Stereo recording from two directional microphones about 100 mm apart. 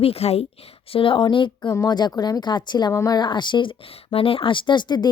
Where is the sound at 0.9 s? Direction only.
65° left (ahead or behind).